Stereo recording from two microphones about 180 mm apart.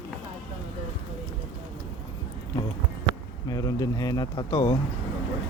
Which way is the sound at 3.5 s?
20° left (ahead or behind).